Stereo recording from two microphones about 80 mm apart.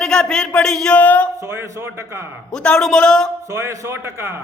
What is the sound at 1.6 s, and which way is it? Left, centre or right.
Speech, right.